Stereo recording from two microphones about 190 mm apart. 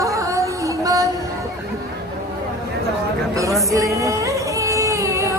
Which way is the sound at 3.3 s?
15° right (ahead or behind).